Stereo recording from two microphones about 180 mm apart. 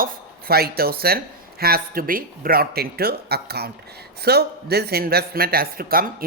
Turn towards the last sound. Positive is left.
turn(degrees=-55)  # may be behind; listen again after turning